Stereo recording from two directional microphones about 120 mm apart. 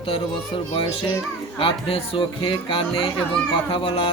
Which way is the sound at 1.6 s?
50° left (ahead or behind).